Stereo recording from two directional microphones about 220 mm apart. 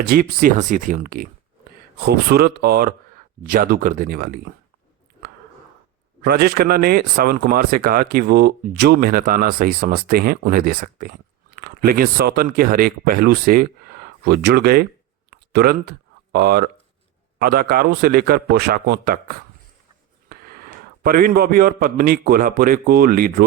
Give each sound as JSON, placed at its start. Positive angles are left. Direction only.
{"t": 0.0, "sound": "speech", "side_deg": -40}
{"t": 6.2, "sound": "speech", "side_deg": -45}
{"t": 15.3, "sound": "a sound", "side_deg": -45}
{"t": 17.4, "sound": "a man's voice", "side_deg": -45}